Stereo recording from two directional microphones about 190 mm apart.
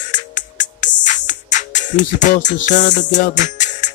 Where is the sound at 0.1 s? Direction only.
40° left (ahead or behind).